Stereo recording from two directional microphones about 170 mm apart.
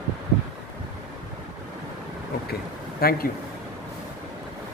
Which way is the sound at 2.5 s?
65° left (ahead or behind).